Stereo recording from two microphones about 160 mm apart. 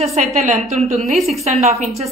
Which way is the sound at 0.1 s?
45° right (ahead or behind).